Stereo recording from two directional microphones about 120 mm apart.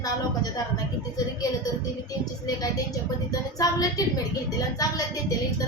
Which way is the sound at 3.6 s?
30° left (ahead or behind).